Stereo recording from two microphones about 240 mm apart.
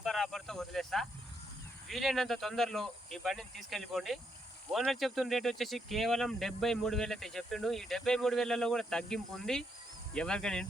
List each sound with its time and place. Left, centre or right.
0.0 s speech: centre